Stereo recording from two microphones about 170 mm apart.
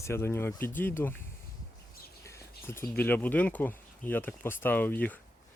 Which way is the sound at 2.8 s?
10° left (ahead or behind).